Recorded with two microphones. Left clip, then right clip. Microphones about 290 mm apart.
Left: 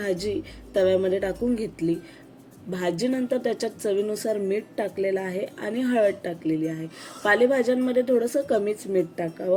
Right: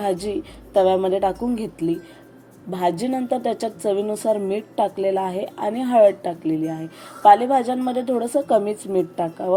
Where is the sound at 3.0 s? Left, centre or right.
Centre.